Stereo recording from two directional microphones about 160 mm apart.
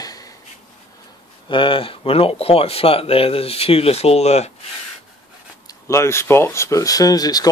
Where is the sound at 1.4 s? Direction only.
30° left (ahead or behind).